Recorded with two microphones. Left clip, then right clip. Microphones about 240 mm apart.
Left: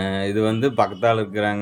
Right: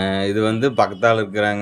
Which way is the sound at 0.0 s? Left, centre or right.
Centre.